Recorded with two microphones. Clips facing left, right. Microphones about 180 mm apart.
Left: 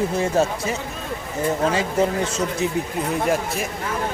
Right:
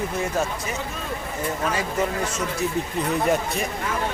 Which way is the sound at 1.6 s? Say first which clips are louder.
Left 3 dB; 30° left (ahead or behind).